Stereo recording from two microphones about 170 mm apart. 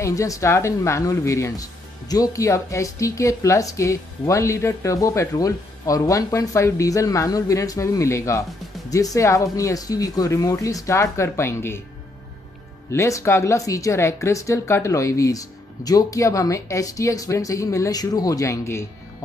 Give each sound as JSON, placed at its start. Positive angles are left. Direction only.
{"t": 0.0, "sound": "speech", "side_deg": 20}
{"t": 12.9, "sound": "speech", "side_deg": 15}